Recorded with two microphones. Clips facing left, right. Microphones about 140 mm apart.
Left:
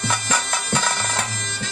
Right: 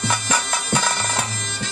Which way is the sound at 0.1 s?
10° right (ahead or behind).